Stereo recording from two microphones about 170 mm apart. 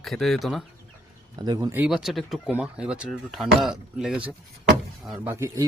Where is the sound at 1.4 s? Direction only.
20° right (ahead or behind).